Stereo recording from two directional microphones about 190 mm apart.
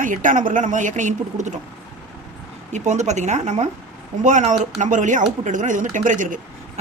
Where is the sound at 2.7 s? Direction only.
40° right (ahead or behind).